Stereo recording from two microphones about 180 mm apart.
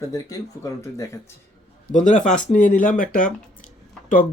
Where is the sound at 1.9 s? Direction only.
45° left (ahead or behind).